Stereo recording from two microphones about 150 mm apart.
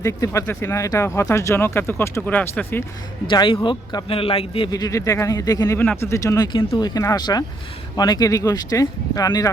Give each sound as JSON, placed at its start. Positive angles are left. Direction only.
{"t": 0.0, "sound": "speech", "side_deg": 20}
{"t": 3.2, "sound": "a man's voice", "side_deg": 35}
{"t": 4.7, "sound": "speech", "side_deg": 20}